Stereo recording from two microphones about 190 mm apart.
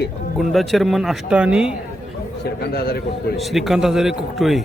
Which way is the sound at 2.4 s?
55° left (ahead or behind).